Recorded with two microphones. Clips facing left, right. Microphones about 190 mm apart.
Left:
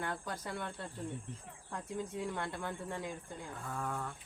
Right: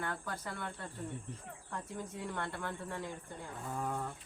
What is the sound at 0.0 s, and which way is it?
Speech, 20° left (ahead or behind).